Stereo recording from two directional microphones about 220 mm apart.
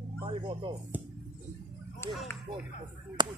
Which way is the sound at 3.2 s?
20° right (ahead or behind).